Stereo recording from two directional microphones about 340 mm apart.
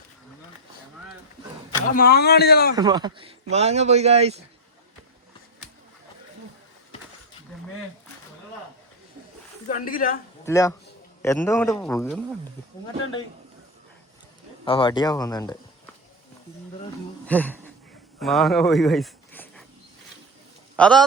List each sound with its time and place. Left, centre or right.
1.9 s a man's voice: left
2.7 s a man's voice: centre
9.6 s a man's voice: left
10.4 s a man's voice: centre
14.6 s a man's voice: centre
17.2 s speech: centre
20.7 s speech: centre